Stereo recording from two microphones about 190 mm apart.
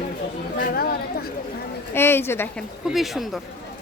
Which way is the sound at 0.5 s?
55° left (ahead or behind).